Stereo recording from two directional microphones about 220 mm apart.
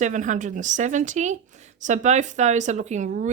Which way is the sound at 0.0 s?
35° right (ahead or behind).